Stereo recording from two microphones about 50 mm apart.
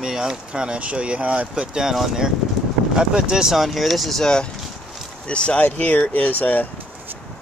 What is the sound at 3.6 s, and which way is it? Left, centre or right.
Speech, centre.